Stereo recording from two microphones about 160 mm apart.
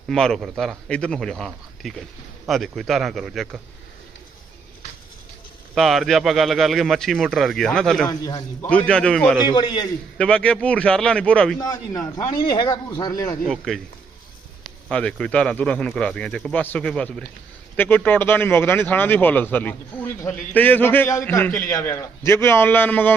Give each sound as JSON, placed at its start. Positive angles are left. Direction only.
{"t": 0.1, "sound": "speech", "side_deg": 0}
{"t": 5.7, "sound": "speech", "side_deg": 0}
{"t": 8.0, "sound": "speech", "side_deg": 25}
{"t": 8.7, "sound": "speech", "side_deg": 5}
{"t": 9.5, "sound": "speech", "side_deg": 30}
{"t": 10.2, "sound": "a man's voice", "side_deg": 5}
{"t": 11.6, "sound": "speech", "side_deg": 25}
{"t": 13.5, "sound": "speech", "side_deg": 0}
{"t": 14.8, "sound": "a man's voice", "side_deg": 5}